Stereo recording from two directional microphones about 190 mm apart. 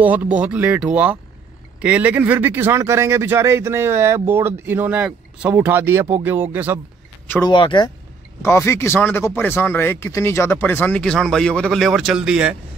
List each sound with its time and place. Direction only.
0.0 s speech: 10° right (ahead or behind)
7.4 s speech: 25° left (ahead or behind)
8.4 s speech: 15° left (ahead or behind); by 12.5 s 5° right (ahead or behind)